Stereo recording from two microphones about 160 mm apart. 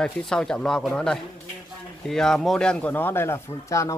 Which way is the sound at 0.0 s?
5° left (ahead or behind).